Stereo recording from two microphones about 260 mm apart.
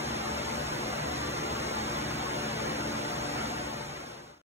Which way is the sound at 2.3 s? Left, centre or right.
Right.